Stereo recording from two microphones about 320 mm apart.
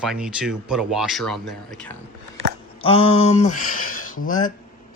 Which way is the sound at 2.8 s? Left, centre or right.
Centre.